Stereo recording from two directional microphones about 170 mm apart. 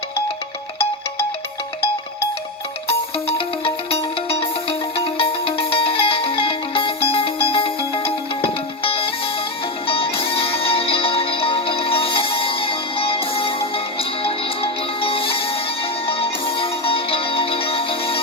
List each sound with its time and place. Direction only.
2.8 s music: 30° left (ahead or behind)